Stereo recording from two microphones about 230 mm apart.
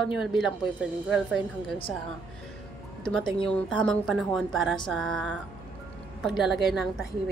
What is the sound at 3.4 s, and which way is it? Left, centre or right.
A woman's voice, centre.